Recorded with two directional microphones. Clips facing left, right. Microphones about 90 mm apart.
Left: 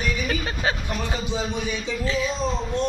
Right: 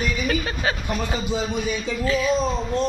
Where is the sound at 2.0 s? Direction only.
25° left (ahead or behind).